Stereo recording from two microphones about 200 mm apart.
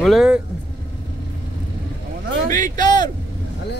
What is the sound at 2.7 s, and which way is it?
Speech, 40° right (ahead or behind).